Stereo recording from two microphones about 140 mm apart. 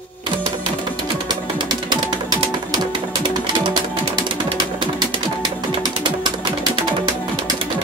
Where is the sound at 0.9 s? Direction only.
30° right (ahead or behind).